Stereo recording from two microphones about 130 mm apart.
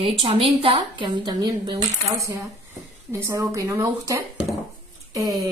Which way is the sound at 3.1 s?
25° right (ahead or behind).